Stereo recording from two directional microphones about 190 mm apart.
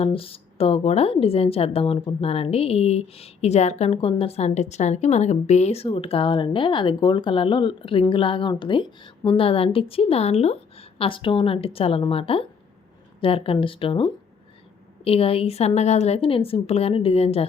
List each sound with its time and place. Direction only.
0.0 s a woman's voice: 30° left (ahead or behind)